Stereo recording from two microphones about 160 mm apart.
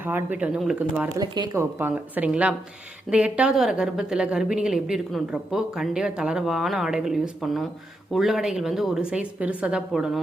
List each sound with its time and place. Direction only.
0.0 s speech: 10° right (ahead or behind)
1.1 s speech: 20° right (ahead or behind)
1.8 s speech: 10° right (ahead or behind)